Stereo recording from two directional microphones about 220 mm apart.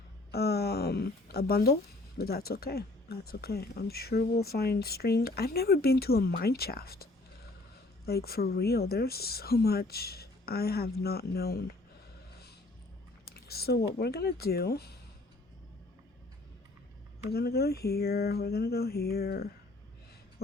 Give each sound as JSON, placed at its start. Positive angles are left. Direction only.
{"t": 0.3, "sound": "a sound", "side_deg": 45}
{"t": 2.1, "sound": "speech", "side_deg": 45}
{"t": 13.3, "sound": "speech", "side_deg": 45}
{"t": 17.2, "sound": "speech", "side_deg": 45}